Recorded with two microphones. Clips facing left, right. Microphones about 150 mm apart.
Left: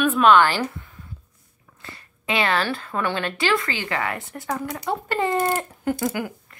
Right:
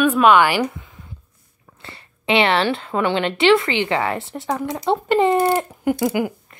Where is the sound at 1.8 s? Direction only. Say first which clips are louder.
Right 6 dB; 25° right (ahead or behind).